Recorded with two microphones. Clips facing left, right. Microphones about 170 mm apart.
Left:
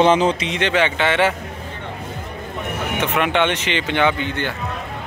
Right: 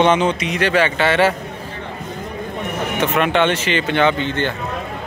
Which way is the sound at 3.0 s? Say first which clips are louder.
Right 2 dB; 10° left (ahead or behind).